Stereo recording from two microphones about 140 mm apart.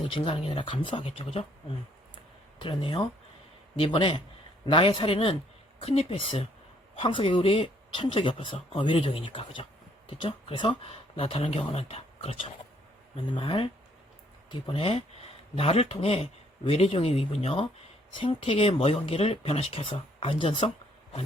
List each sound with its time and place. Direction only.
0.1 s speech: 40° left (ahead or behind)
2.6 s speech: 40° left (ahead or behind)